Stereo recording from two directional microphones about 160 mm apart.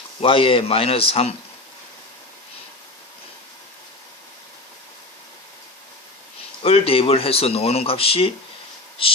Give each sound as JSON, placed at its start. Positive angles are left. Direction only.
{"t": 0.2, "sound": "speech", "side_deg": 35}
{"t": 6.6, "sound": "speech", "side_deg": 35}